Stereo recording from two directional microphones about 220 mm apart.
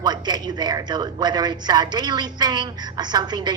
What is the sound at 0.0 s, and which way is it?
A woman's voice, 20° right (ahead or behind).